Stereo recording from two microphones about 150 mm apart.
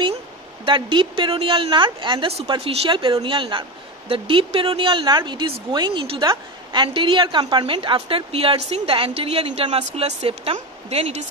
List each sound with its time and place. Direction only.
0.7 s a woman's voice: 35° right (ahead or behind)